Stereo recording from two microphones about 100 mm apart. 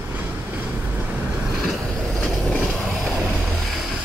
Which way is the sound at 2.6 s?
10° left (ahead or behind).